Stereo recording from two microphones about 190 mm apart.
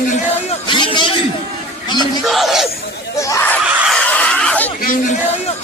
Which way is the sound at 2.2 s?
Centre (ahead or behind).